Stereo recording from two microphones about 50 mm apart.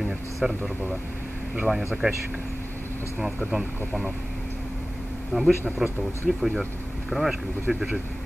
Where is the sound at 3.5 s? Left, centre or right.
Centre.